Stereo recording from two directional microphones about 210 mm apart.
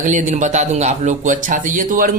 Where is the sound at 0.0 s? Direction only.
35° right (ahead or behind).